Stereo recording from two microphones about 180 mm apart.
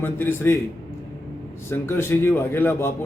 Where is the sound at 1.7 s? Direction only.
15° left (ahead or behind).